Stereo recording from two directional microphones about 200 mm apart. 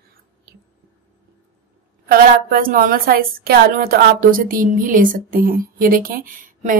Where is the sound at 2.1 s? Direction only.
45° right (ahead or behind).